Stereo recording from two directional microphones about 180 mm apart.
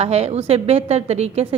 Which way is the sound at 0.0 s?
35° right (ahead or behind).